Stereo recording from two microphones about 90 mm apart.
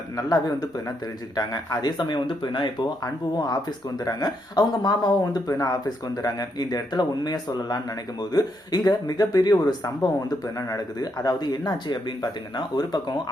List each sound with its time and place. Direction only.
0.2 s speech: 45° left (ahead or behind)